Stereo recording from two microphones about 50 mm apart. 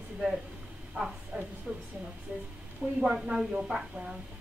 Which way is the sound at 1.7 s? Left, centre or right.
Centre.